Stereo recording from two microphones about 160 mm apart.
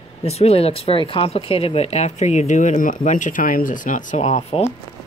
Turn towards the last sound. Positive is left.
turn(degrees=40)  # may be behind; listen again after turning